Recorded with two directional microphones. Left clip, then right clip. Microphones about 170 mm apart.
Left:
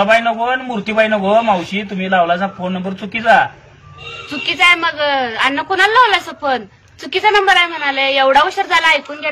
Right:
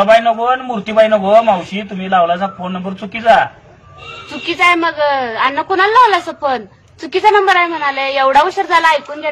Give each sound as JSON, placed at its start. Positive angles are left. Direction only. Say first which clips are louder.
{"t": 0.0, "sound": "a man's voice", "louder": "right 3 dB", "side_deg": 0}
{"t": 4.5, "sound": "speech", "louder": "even", "side_deg": -40}